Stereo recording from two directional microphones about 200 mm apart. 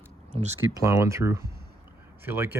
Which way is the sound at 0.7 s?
15° right (ahead or behind).